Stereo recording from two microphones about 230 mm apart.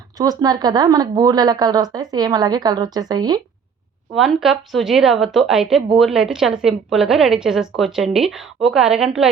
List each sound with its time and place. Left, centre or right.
0.2 s a woman's voice: centre
4.1 s a woman's voice: centre